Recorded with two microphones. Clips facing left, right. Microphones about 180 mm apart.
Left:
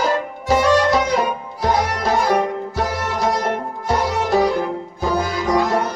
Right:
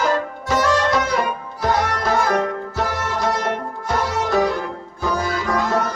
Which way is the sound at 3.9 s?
20° left (ahead or behind).